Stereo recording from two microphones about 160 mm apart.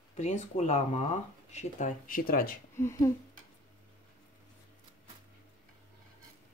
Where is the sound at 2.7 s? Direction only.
15° left (ahead or behind).